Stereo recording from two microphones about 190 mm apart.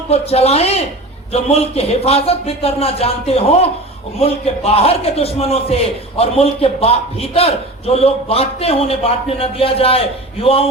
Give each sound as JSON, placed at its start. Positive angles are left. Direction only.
{"t": 0.1, "sound": "a man's voice", "side_deg": 35}